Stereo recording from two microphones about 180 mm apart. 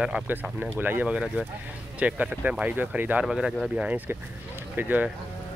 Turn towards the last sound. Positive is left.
turn(degrees=-10)  # may be behind; listen again after turning